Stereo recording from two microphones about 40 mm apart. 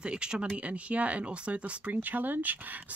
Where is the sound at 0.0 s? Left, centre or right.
Right.